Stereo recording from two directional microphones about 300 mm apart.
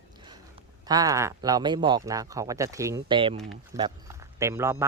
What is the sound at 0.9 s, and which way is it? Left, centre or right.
Speech, centre.